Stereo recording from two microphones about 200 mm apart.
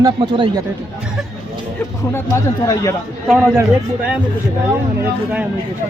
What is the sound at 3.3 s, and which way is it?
Speech, 10° right (ahead or behind).